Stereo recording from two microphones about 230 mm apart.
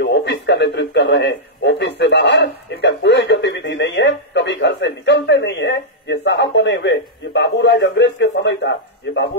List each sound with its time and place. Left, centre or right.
0.0 s a man's voice: left